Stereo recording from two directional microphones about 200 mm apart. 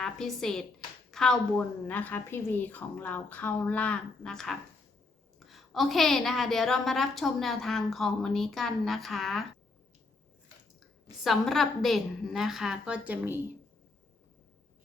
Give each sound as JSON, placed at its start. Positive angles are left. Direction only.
{"t": 0.0, "sound": "a woman's voice", "side_deg": 5}
{"t": 10.8, "sound": "a woman's voice", "side_deg": 0}